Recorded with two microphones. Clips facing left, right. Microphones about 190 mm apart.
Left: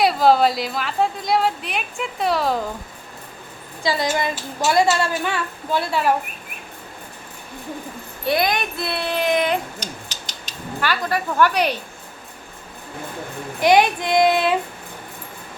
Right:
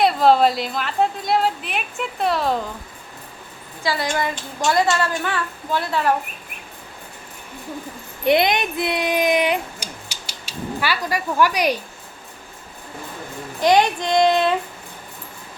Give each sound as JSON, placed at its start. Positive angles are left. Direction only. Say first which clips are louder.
{"t": 0.0, "sound": "a woman's voice", "louder": "even", "side_deg": 0}
{"t": 3.8, "sound": "a woman's voice", "louder": "left 2 dB", "side_deg": 15}
{"t": 4.4, "sound": "a woman's voice", "louder": "left 2 dB", "side_deg": 5}
{"t": 8.2, "sound": "speech", "louder": "right 3 dB", "side_deg": -20}
{"t": 13.6, "sound": "a woman's voice", "louder": "left 1 dB", "side_deg": 10}